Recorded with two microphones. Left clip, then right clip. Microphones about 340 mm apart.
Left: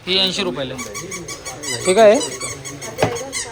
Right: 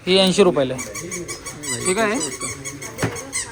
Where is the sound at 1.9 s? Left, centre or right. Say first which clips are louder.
Left 11 dB; centre.